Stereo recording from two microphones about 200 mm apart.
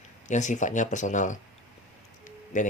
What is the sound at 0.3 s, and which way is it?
Speech, 35° left (ahead or behind).